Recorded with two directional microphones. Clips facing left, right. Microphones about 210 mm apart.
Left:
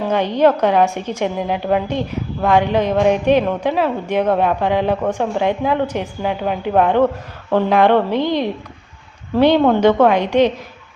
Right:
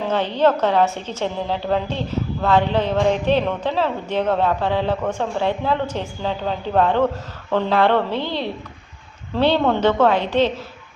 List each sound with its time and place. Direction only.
0.0 s a woman's voice: 15° left (ahead or behind)